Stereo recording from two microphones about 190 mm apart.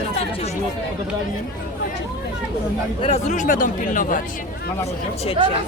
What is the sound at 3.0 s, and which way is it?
Speech, 35° left (ahead or behind).